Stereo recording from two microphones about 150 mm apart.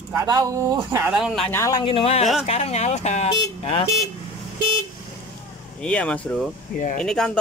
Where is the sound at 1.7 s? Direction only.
35° left (ahead or behind).